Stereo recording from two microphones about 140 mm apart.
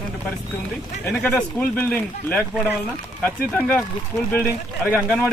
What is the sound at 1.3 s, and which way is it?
Speech, 10° left (ahead or behind).